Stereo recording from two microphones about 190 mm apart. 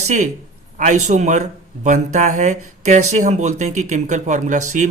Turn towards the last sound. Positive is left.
turn(degrees=-40)  # may be behind; listen again after turning